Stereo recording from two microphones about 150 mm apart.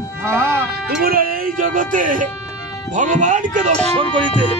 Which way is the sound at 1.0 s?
80° right.